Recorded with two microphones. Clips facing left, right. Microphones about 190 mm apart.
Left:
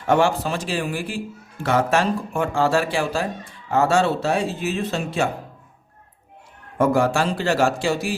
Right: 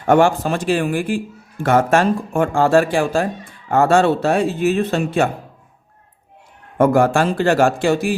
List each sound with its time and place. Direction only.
0.1 s speech: 50° right (ahead or behind)
6.7 s speech: 55° right (ahead or behind)